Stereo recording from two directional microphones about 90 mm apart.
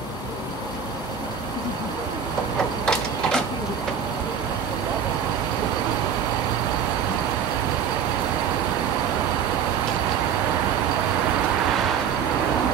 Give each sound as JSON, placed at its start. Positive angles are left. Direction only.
{"t": 2.8, "sound": "printer", "side_deg": 5}